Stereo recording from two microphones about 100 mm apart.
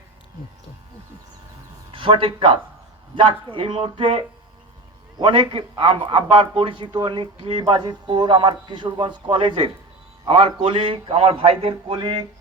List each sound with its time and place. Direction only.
1.9 s a man's voice: 60° right (ahead or behind)
5.2 s a man's voice: 55° right (ahead or behind)